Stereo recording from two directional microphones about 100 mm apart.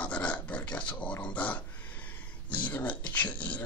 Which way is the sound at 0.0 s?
10° left (ahead or behind).